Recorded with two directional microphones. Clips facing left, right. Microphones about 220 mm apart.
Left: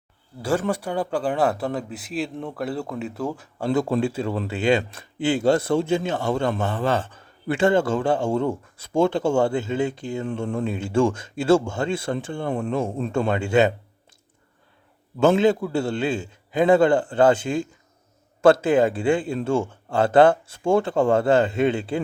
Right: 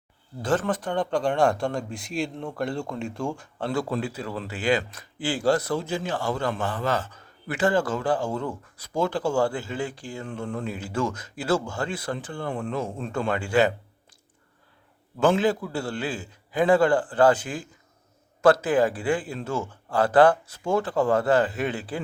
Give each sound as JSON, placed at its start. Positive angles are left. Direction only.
{"t": 0.6, "sound": "a man's voice", "side_deg": 10}
{"t": 3.7, "sound": "a man's voice", "side_deg": 20}
{"t": 15.4, "sound": "a man's voice", "side_deg": 25}